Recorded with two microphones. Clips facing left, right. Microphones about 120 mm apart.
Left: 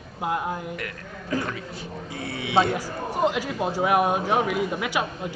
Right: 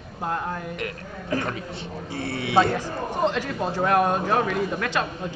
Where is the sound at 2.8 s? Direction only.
10° left (ahead or behind).